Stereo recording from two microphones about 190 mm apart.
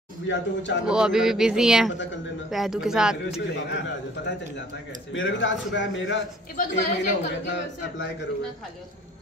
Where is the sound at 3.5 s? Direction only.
65° left (ahead or behind).